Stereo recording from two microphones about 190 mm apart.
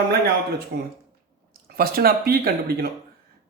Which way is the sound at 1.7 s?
50° right (ahead or behind).